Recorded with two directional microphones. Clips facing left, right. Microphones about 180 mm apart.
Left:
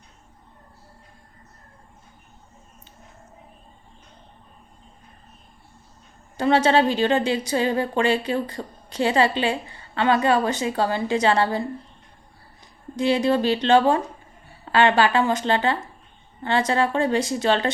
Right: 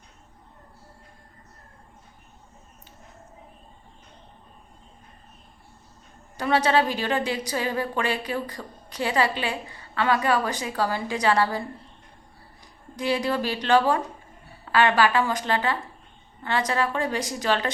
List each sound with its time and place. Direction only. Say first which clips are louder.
6.3 s a woman's voice: left 4 dB; 25° left (ahead or behind)
13.0 s a woman's voice: left 5 dB; 25° left (ahead or behind)